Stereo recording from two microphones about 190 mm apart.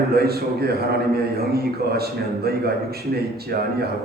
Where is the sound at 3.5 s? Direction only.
55° right (ahead or behind).